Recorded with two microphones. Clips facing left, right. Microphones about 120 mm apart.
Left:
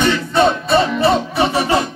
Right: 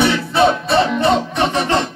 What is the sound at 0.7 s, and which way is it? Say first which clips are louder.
Music: even; 5° left (ahead or behind).